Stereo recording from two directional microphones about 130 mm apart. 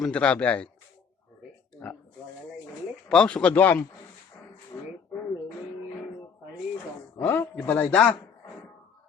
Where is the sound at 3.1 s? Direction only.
5° left (ahead or behind).